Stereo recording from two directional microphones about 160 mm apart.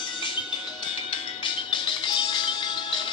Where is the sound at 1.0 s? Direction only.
30° left (ahead or behind).